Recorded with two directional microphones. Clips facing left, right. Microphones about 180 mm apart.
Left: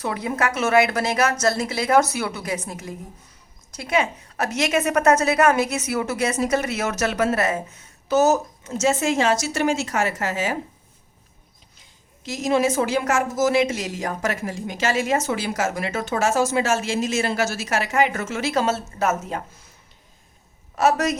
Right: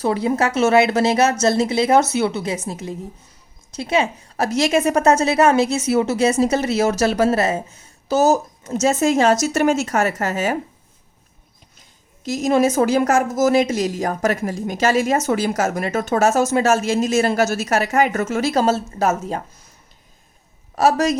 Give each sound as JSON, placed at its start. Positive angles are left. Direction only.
{"t": 0.0, "sound": "a woman's voice", "side_deg": -30}
{"t": 12.2, "sound": "a woman's voice", "side_deg": -40}
{"t": 20.7, "sound": "a woman's voice", "side_deg": -30}